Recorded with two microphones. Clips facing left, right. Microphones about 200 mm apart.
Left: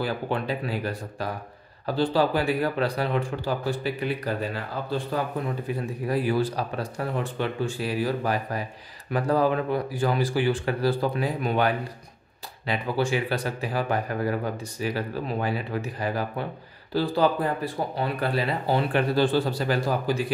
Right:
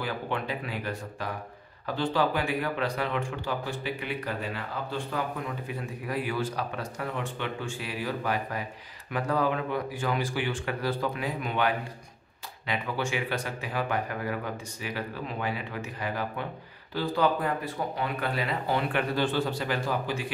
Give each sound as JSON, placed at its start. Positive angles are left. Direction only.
{"t": 0.0, "sound": "speech", "side_deg": 35}